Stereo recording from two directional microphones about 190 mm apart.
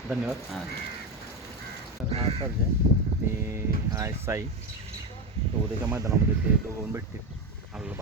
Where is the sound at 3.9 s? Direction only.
15° right (ahead or behind).